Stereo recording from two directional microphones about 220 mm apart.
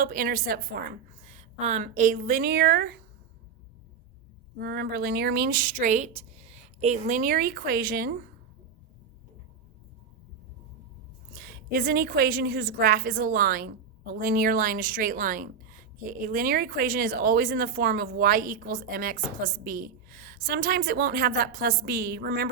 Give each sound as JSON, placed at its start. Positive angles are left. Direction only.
{"t": 0.0, "sound": "a woman's voice", "side_deg": -40}
{"t": 4.5, "sound": "a woman's voice", "side_deg": -45}
{"t": 11.3, "sound": "a woman's voice", "side_deg": -40}